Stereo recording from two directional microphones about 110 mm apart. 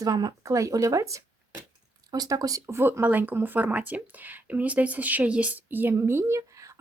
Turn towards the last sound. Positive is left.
turn(degrees=-30)  # may be behind; listen again after turning